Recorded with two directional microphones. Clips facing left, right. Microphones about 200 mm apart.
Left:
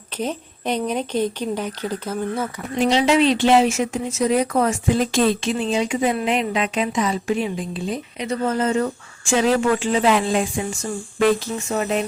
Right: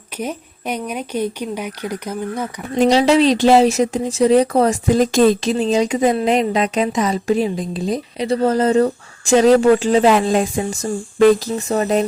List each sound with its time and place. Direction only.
0.2 s speech: 10° right (ahead or behind)
2.7 s a woman's voice: 40° right (ahead or behind)